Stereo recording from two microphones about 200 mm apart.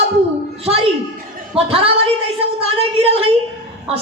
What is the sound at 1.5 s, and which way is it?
A woman's voice, 30° right (ahead or behind).